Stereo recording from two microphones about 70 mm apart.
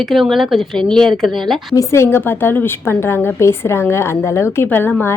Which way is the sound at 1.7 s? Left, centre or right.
Left.